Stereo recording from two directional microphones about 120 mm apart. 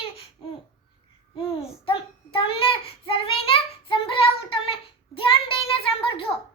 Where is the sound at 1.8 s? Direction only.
45° left (ahead or behind).